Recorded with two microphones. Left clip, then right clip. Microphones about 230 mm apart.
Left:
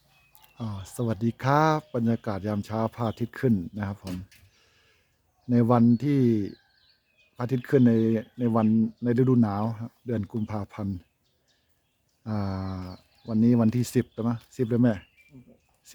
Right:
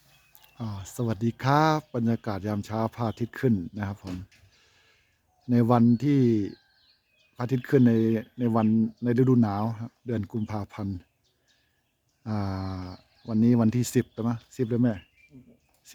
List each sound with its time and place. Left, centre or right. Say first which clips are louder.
0.3 s speech: left 1 dB; centre
4.0 s speech: left 1 dB; left
4.5 s a sound: right 1 dB; centre
5.5 s speech: even; centre
12.2 s speech: even; centre